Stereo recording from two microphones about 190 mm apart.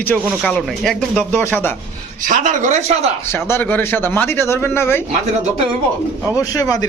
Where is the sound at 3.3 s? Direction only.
10° left (ahead or behind).